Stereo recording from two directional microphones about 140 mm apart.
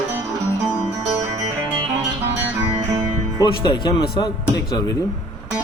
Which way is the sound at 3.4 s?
30° left (ahead or behind).